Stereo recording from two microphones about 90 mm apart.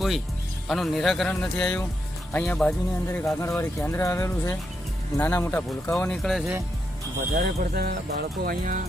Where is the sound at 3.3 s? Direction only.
30° left (ahead or behind).